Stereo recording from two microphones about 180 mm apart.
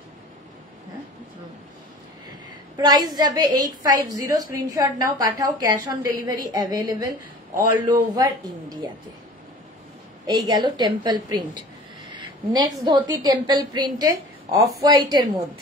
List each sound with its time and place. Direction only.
2.8 s a woman's voice: 25° right (ahead or behind)
10.4 s a woman's voice: 25° right (ahead or behind)